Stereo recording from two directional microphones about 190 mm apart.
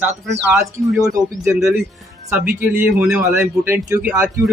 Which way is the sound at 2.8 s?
10° right (ahead or behind).